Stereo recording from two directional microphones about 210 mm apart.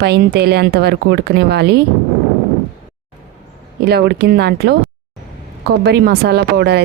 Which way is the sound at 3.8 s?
50° right (ahead or behind).